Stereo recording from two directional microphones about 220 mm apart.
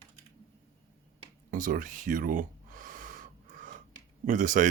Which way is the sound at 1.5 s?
40° right (ahead or behind).